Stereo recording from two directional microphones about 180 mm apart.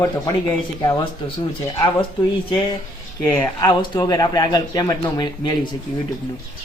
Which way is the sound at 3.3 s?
15° left (ahead or behind).